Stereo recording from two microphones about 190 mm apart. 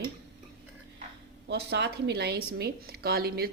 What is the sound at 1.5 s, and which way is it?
Speech, 60° right (ahead or behind).